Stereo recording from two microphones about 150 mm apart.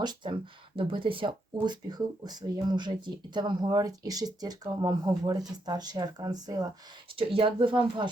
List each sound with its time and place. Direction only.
0.0 s speech: 30° right (ahead or behind)